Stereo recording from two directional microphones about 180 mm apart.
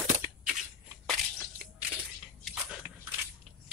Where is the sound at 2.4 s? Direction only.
5° right (ahead or behind).